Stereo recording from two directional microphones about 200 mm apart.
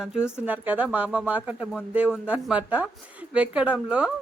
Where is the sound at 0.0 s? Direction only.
5° right (ahead or behind).